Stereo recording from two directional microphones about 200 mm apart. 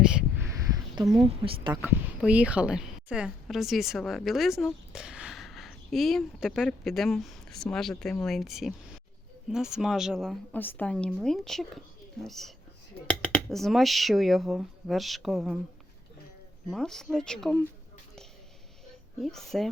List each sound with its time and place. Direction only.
1.3 s speech: 25° right (ahead or behind)
1.7 s a woman's voice: 10° right (ahead or behind)
16.6 s a woman's voice: centre (ahead or behind)
19.2 s a woman's voice: centre (ahead or behind)